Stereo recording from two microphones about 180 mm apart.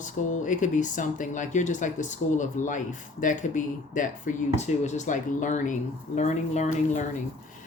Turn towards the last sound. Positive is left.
turn(degrees=40)  # may be behind; listen again after turning